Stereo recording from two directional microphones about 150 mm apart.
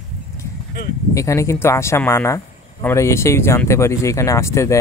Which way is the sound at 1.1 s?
20° left (ahead or behind).